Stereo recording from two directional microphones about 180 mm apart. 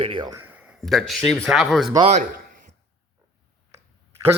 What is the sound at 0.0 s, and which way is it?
Speech, 25° right (ahead or behind).